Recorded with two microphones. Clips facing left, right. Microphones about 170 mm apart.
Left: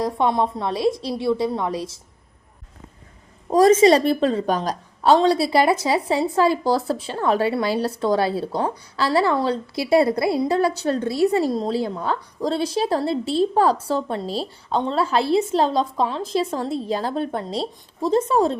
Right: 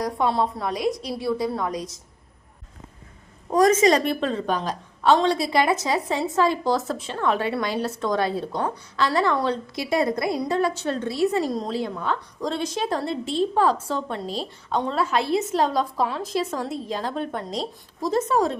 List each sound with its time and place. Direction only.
0.0 s a woman's voice: 20° left (ahead or behind)
3.5 s a woman's voice: 30° left (ahead or behind)